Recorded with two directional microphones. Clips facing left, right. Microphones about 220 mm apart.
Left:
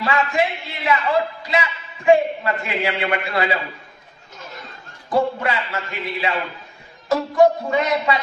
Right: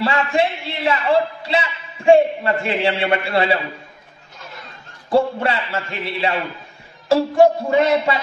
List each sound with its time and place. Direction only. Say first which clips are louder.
0.0 s a man's voice: right 2 dB; 30° right (ahead or behind)
5.1 s a man's voice: right 3 dB; 30° right (ahead or behind)